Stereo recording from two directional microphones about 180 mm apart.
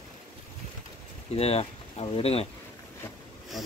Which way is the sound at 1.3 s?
35° left (ahead or behind).